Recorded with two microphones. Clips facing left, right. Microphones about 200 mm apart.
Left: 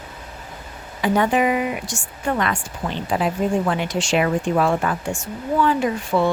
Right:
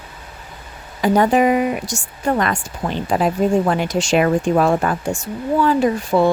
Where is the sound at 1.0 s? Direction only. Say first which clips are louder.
Right 4 dB; 40° right (ahead or behind).